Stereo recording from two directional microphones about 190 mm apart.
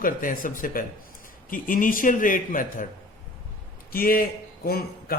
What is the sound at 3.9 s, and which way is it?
A man's voice, 50° left (ahead or behind).